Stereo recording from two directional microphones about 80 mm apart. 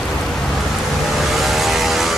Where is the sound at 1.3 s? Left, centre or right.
Centre.